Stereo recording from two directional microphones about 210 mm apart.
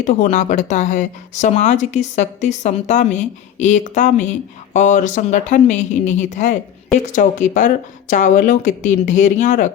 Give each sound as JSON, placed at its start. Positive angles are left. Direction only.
{"t": 0.0, "sound": "speech", "side_deg": 35}